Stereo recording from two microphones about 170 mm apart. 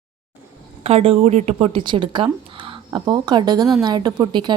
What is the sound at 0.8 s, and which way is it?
A woman's voice, 35° right (ahead or behind).